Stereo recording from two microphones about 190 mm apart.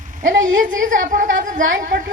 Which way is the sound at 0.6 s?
45° right (ahead or behind).